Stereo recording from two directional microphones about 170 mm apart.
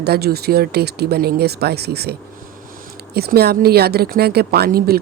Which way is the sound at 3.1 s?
65° right (ahead or behind).